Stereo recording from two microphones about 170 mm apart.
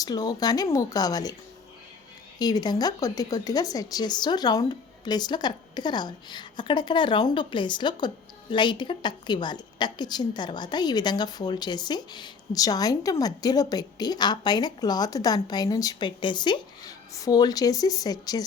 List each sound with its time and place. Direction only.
0.0 s speech: 20° left (ahead or behind)
2.4 s speech: 25° left (ahead or behind)